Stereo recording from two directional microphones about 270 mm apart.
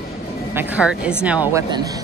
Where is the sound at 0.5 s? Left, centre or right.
Centre.